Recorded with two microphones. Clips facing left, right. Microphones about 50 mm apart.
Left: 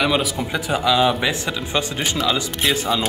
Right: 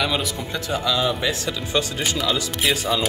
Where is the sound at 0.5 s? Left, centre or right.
Left.